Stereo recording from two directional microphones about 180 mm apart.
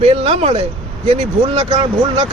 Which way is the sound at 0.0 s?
35° right (ahead or behind).